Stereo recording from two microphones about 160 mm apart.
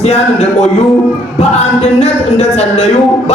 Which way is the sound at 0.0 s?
45° left (ahead or behind).